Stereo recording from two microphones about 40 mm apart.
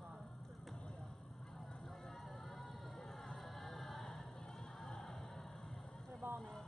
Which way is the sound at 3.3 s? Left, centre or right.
Centre.